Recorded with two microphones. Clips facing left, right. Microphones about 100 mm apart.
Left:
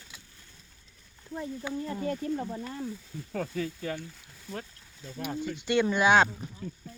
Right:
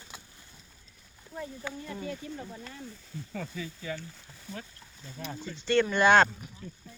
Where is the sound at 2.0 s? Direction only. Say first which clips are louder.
Left 8 dB; 45° left (ahead or behind).